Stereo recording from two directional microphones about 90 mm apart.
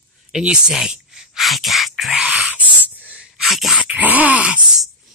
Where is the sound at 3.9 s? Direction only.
15° right (ahead or behind).